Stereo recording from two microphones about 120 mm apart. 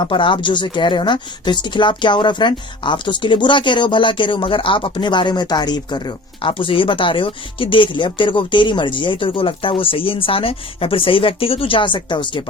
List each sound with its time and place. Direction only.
0.0 s speech: 45° left (ahead or behind)